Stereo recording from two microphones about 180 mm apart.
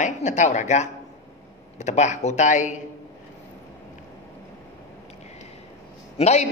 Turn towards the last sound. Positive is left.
turn(degrees=40)  # may be behind; listen again after turning